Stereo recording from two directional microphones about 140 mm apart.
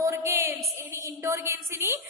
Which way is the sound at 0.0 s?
20° right (ahead or behind).